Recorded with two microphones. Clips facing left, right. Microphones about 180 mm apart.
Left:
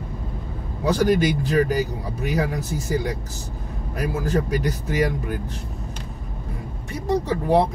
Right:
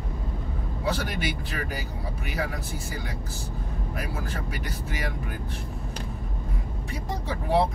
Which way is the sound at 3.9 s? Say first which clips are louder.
Left 12 dB; 40° left (ahead or behind).